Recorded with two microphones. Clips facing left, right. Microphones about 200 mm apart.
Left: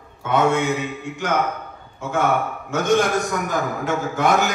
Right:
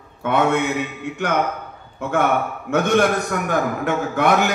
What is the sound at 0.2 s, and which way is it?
A man's voice, 60° right (ahead or behind).